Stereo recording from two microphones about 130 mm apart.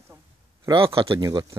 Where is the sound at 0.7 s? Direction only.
45° right (ahead or behind).